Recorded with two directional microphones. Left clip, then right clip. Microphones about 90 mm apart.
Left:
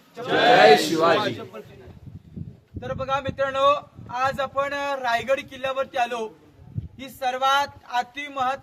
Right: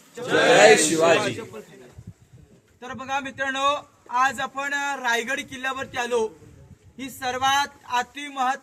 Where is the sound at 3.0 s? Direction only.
40° left (ahead or behind).